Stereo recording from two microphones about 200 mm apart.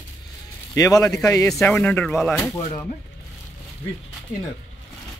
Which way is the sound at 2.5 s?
20° left (ahead or behind).